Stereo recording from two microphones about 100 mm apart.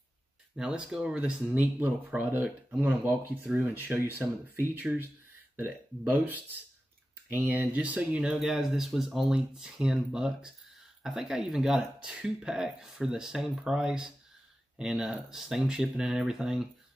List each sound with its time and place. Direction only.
0.6 s speech: 5° right (ahead or behind)
6.1 s speech: 20° right (ahead or behind)